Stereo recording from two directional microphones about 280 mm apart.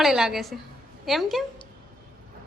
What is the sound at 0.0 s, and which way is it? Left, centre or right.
Speech, centre.